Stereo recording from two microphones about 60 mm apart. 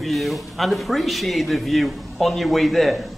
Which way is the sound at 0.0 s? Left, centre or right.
Centre.